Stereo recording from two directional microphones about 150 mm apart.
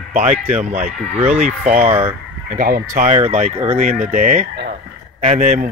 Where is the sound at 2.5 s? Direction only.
70° right (ahead or behind).